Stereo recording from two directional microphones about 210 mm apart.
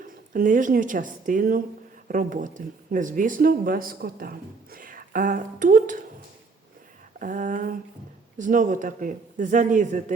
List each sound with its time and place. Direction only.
0.0 s speech: 40° right (ahead or behind)
7.2 s speech: 40° right (ahead or behind)